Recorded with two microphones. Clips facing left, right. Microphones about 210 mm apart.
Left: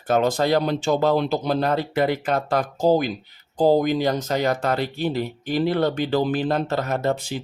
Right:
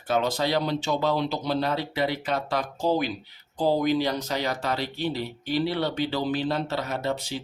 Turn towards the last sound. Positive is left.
turn(degrees=50)  # may be behind; listen again after turning